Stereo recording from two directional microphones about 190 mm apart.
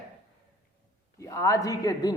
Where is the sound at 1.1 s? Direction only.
15° left (ahead or behind).